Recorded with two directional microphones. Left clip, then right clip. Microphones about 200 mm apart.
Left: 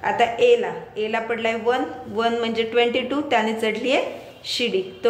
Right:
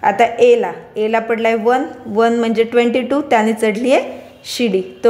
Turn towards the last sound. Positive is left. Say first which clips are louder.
# right 6 dB
turn(degrees=-45)  # may be behind; listen again after turning